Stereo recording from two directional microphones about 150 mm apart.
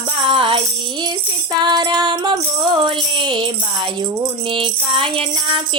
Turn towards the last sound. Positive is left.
turn(degrees=-35)  # may be behind; listen again after turning